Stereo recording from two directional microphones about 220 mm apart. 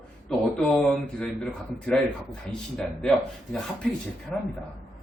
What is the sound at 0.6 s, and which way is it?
Speech, 5° left (ahead or behind).